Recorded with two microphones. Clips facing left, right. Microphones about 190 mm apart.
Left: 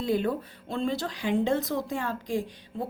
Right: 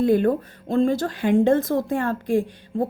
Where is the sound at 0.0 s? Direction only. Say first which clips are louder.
Right 8 dB; 55° right (ahead or behind).